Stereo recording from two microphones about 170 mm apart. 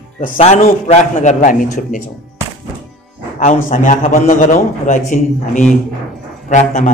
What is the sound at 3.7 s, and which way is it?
A man's voice, 50° left (ahead or behind).